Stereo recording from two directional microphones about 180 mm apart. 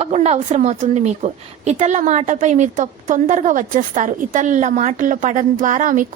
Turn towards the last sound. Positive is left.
turn(degrees=-45)  # may be behind; listen again after turning